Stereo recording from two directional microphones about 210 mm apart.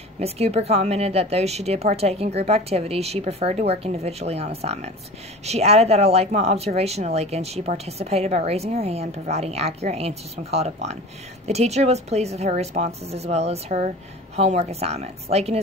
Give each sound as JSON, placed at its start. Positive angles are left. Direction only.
{"t": 0.2, "sound": "a woman's voice", "side_deg": -30}